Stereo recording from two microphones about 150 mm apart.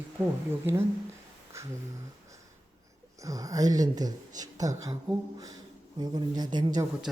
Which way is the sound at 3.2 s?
20° right (ahead or behind).